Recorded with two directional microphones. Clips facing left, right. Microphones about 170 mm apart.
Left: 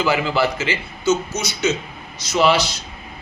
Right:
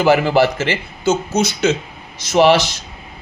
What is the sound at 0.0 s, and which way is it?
A man's voice, 55° right (ahead or behind).